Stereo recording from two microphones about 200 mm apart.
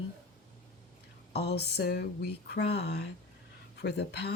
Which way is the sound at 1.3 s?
55° left (ahead or behind).